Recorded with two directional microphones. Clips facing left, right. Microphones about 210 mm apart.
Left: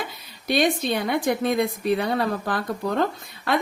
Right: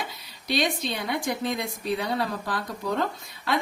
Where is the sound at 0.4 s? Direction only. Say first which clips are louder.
Left 5 dB; 50° left (ahead or behind).